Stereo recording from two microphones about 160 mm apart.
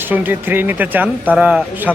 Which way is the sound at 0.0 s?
10° right (ahead or behind).